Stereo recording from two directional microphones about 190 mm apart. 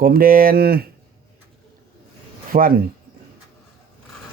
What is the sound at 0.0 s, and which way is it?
Speech, 50° right (ahead or behind).